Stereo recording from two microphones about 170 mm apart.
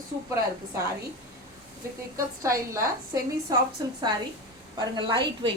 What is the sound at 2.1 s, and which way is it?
A woman's voice, 20° right (ahead or behind).